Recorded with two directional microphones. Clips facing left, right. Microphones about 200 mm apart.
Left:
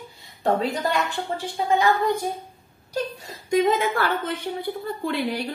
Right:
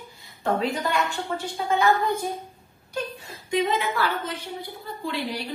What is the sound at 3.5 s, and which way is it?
A woman's voice, 45° left (ahead or behind).